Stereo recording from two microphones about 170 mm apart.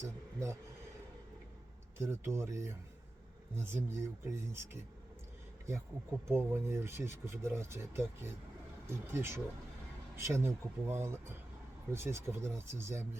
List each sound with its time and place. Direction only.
0.0 s speech: 15° right (ahead or behind)
2.0 s speech: 15° right (ahead or behind)
6.3 s speech: 15° right (ahead or behind)